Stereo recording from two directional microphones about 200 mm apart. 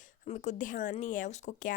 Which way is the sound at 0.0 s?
40° left (ahead or behind).